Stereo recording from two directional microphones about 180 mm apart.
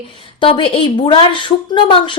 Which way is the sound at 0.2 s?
30° left (ahead or behind).